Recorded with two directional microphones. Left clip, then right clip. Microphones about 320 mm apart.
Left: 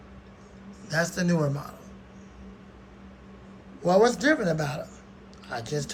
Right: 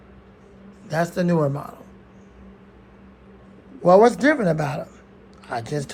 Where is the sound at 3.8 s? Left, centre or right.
Centre.